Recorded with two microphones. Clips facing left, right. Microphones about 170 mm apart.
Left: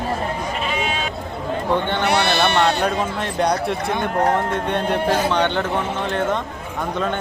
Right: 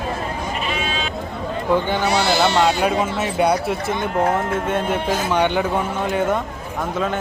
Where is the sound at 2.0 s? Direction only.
65° left (ahead or behind).